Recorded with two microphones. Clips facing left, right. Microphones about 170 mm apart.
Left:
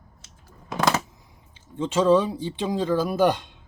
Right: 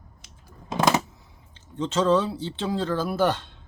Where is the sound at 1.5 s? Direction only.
10° left (ahead or behind).